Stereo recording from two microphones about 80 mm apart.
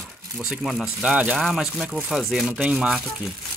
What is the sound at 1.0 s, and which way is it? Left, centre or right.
Speech, centre.